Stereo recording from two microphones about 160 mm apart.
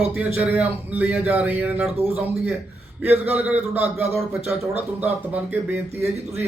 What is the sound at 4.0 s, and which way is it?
A man's voice, 15° right (ahead or behind).